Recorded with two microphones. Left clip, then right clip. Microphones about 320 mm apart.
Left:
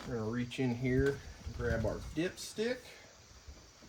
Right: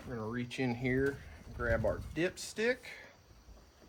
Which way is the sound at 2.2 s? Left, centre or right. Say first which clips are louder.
Right 2 dB; centre.